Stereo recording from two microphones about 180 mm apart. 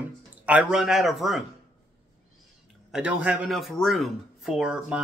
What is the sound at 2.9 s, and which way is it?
Speech, 5° right (ahead or behind).